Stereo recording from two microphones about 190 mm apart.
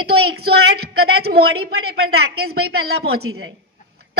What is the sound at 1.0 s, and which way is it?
A woman's voice, 55° right (ahead or behind).